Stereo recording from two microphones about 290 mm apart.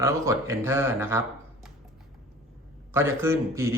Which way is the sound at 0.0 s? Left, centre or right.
Centre.